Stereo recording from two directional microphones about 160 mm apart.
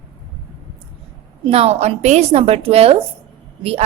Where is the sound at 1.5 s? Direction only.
40° right (ahead or behind).